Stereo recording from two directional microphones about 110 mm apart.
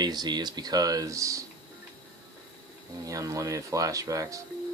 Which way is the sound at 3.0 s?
30° right (ahead or behind).